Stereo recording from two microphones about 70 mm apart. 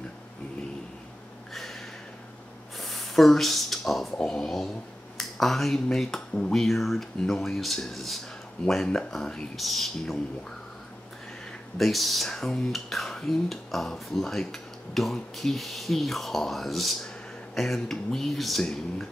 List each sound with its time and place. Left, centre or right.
1.5 s a sound: centre
2.8 s speech: centre
11.8 s speech: centre